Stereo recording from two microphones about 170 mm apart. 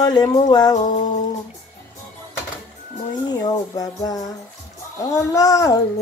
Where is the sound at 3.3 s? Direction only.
25° left (ahead or behind).